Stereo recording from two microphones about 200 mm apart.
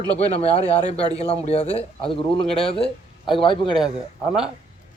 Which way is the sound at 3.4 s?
25° left (ahead or behind).